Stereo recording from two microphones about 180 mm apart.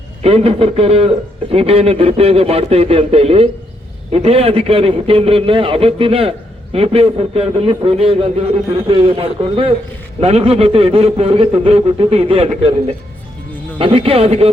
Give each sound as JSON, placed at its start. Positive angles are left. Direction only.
{"t": 0.2, "sound": "a man's voice", "side_deg": -35}
{"t": 13.7, "sound": "a man's voice", "side_deg": -30}